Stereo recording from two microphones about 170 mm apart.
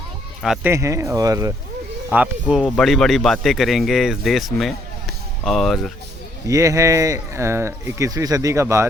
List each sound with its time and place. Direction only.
0.4 s speech: centre (ahead or behind)
0.7 s speech: 15° right (ahead or behind)
2.0 s speech: 10° right (ahead or behind)
6.5 s speech: 20° right (ahead or behind)